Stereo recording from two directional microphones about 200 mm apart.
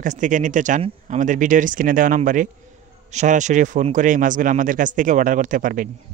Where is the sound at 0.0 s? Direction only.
40° right (ahead or behind).